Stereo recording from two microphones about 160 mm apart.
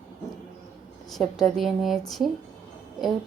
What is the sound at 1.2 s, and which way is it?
A woman's voice, centre (ahead or behind).